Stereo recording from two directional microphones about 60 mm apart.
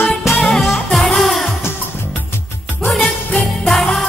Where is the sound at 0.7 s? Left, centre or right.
Centre.